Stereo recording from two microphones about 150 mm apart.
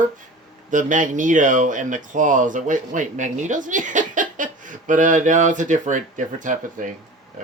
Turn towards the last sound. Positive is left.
turn(degrees=-60)  # may be behind; listen again after turning